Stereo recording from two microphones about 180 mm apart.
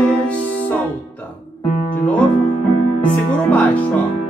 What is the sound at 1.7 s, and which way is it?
Music, 45° left (ahead or behind).